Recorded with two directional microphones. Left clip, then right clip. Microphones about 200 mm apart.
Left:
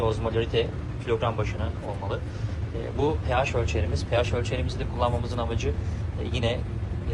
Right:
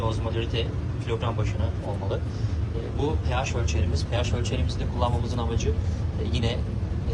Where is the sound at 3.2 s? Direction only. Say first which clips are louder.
Left 4 dB; 10° right (ahead or behind).